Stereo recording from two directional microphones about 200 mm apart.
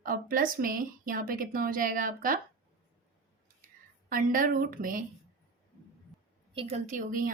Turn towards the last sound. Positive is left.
turn(degrees=-45)  # may be behind; listen again after turning